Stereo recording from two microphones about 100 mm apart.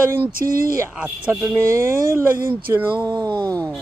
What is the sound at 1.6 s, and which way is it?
Speech, 30° right (ahead or behind).